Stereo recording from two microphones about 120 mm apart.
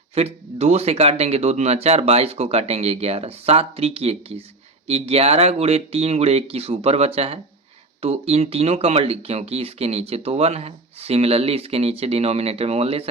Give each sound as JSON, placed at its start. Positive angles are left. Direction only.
{"t": 0.1, "sound": "speech", "side_deg": -60}